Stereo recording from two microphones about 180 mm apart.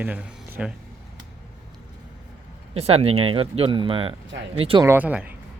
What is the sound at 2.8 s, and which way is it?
Speech, 35° right (ahead or behind).